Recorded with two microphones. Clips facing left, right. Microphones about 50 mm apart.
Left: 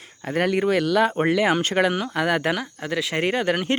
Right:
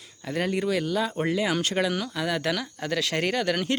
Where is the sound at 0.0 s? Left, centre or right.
Left.